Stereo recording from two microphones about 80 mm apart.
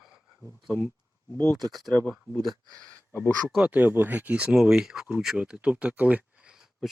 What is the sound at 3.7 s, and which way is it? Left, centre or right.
Speech, right.